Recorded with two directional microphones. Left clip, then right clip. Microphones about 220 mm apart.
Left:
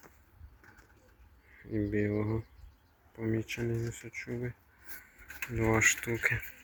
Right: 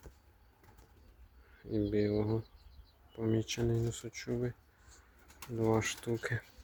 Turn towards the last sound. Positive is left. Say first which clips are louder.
# left 6 dB
turn(degrees=-10)  # may be behind; listen again after turning